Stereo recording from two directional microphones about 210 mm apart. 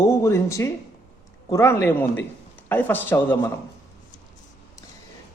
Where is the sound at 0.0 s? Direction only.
15° left (ahead or behind).